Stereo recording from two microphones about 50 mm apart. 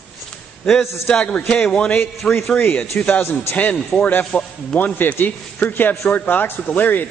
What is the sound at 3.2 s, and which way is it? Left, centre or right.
Speech, left.